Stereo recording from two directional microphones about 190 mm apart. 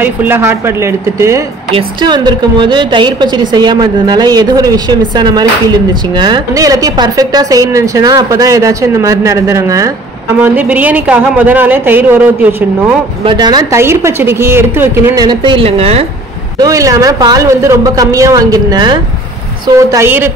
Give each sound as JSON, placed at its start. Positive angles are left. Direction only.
{"t": 0.0, "sound": "a woman's voice", "side_deg": -10}
{"t": 1.7, "sound": "a woman's voice", "side_deg": -25}
{"t": 13.2, "sound": "a woman's voice", "side_deg": -25}
{"t": 15.2, "sound": "a woman's voice", "side_deg": -25}
{"t": 16.5, "sound": "a woman's voice", "side_deg": -15}